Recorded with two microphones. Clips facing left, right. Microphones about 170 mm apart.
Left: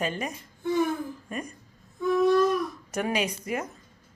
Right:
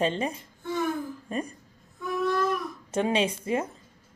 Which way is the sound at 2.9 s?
25° right (ahead or behind).